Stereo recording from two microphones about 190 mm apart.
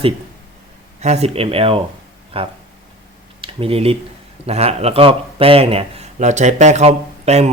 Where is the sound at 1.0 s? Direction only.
35° right (ahead or behind).